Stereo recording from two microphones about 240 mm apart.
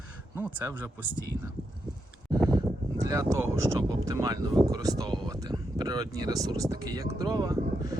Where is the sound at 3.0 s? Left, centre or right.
Centre.